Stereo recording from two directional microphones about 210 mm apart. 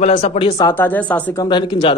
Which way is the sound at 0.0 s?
30° left (ahead or behind).